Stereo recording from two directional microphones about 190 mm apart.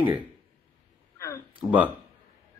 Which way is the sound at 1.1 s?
15° left (ahead or behind).